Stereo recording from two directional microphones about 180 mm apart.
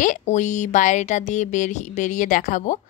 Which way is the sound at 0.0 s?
45° left (ahead or behind).